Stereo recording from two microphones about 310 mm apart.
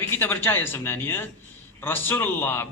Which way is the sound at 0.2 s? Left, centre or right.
Centre.